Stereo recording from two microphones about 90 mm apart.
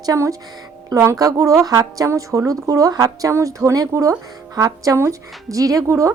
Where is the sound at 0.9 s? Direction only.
35° right (ahead or behind).